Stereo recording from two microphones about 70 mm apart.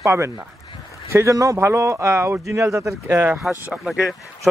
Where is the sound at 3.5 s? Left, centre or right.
Centre.